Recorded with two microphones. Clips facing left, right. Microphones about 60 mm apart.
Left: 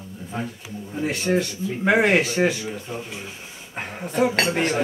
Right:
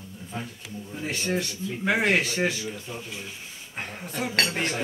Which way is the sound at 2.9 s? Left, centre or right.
Centre.